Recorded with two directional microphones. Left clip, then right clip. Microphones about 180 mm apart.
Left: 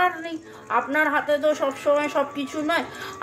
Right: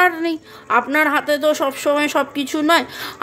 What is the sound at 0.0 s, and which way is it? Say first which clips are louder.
A woman's voice: right 7 dB; 65° right (ahead or behind).